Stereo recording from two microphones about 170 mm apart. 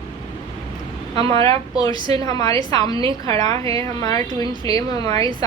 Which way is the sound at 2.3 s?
20° left (ahead or behind).